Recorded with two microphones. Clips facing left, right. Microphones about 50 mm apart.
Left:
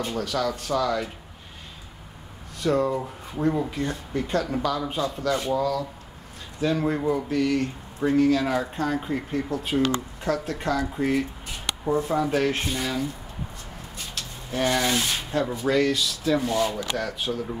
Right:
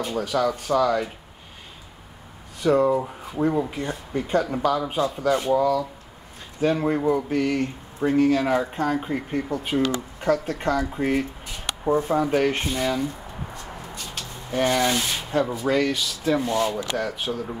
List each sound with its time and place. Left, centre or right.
0.0 s speech: centre
2.6 s speech: centre
7.2 s speech: right; by 13.1 s centre
14.1 s speech: centre
15.7 s speech: centre
17.1 s speech: right